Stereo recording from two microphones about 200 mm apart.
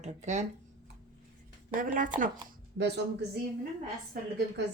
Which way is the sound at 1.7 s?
40° right (ahead or behind).